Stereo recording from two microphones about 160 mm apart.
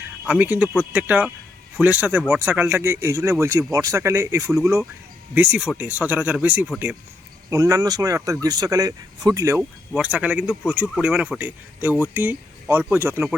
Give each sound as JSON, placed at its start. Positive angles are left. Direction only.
{"t": 0.3, "sound": "speech", "side_deg": -10}
{"t": 7.5, "sound": "speech", "side_deg": -20}
{"t": 9.9, "sound": "speech", "side_deg": -10}